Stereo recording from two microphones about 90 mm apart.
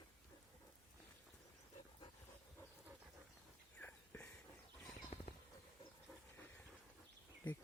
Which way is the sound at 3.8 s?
15° left (ahead or behind).